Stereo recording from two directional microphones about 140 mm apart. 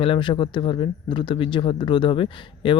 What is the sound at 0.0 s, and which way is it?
Speech, 40° left (ahead or behind).